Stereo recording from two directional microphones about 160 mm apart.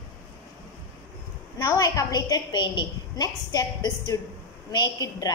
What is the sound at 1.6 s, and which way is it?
A woman's voice, 20° left (ahead or behind).